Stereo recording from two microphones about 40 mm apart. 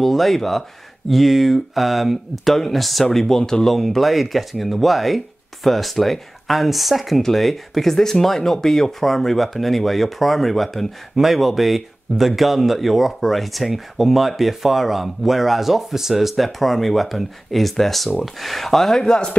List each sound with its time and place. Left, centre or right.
0.0 s speech: centre
19.0 s speech: left